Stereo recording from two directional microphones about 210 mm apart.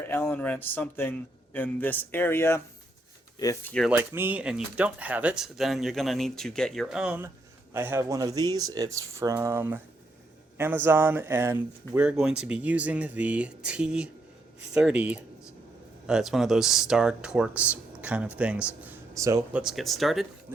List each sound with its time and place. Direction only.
0.0 s a man's voice: 10° left (ahead or behind)
3.8 s speech: 10° right (ahead or behind)
19.6 s speech: centre (ahead or behind)